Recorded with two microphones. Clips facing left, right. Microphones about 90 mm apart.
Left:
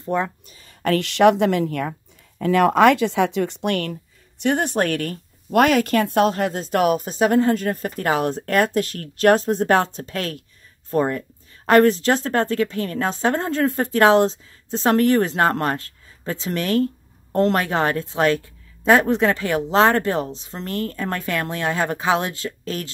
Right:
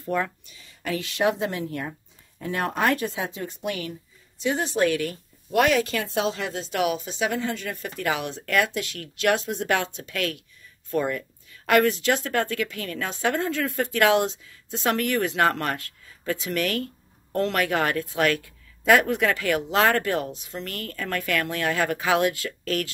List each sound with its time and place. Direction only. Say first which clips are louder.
0.0 s speech: left 3 dB; 25° left (ahead or behind)
0.5 s a sound: left 2 dB; 40° left (ahead or behind)
0.8 s speech: left 9 dB; 70° left (ahead or behind); by 22.8 s 25° left (ahead or behind)